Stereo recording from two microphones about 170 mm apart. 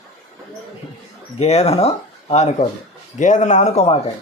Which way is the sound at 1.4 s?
35° left (ahead or behind).